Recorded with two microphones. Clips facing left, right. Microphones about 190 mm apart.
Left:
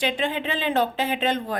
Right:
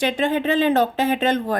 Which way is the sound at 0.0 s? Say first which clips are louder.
Right 5 dB; 45° right (ahead or behind).